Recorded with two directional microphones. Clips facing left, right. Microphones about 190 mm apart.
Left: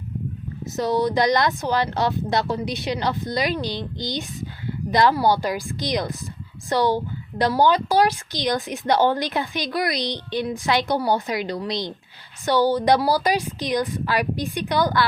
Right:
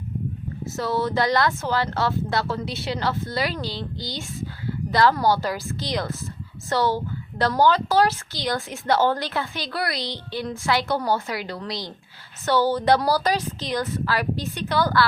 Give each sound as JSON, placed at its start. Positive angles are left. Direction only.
{"t": 0.6, "sound": "a woman's voice", "side_deg": 20}